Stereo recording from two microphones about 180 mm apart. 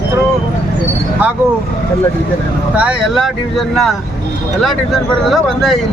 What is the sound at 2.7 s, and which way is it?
Speech, 5° right (ahead or behind).